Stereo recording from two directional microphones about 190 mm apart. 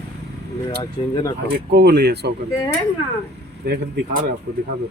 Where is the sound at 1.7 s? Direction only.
60° right (ahead or behind).